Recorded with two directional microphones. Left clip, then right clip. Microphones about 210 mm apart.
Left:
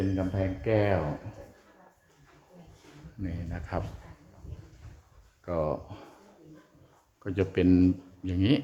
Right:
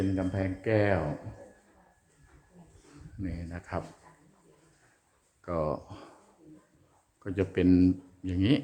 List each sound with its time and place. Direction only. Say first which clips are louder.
0.2 s speech: left 1 dB; 5° right (ahead or behind)
3.2 s speech: even; 5° right (ahead or behind)
5.5 s speech: left 1 dB; 5° right (ahead or behind)
7.3 s speech: left 1 dB; centre (ahead or behind)